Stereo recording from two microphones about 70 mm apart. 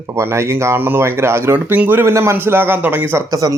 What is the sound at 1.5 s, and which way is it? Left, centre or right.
A man's voice, right.